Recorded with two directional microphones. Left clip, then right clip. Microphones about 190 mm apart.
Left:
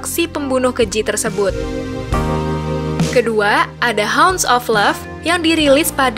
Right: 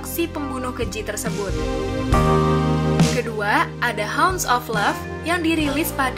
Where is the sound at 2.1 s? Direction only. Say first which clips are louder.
Right 2 dB; centre (ahead or behind).